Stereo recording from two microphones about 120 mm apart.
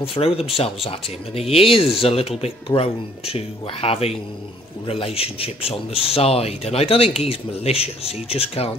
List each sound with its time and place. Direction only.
0.0 s speech: 55° left (ahead or behind)